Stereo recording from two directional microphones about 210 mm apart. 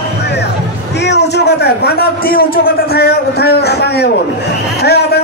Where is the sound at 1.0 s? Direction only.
50° left (ahead or behind).